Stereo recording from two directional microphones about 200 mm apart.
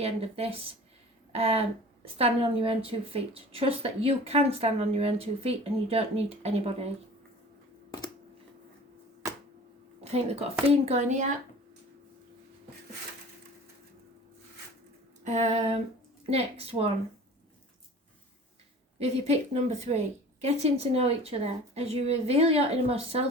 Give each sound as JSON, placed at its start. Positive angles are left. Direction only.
{"t": 0.0, "sound": "a woman's voice", "side_deg": -30}
{"t": 10.0, "sound": "a woman's voice", "side_deg": -30}
{"t": 15.2, "sound": "a woman's voice", "side_deg": -35}
{"t": 19.0, "sound": "a woman's voice", "side_deg": -30}